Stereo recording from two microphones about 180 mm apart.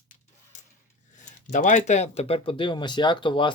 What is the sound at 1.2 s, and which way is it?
Speech, 45° left (ahead or behind).